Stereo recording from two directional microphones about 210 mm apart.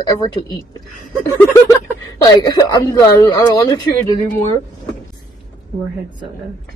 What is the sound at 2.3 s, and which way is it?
Speech, 20° left (ahead or behind).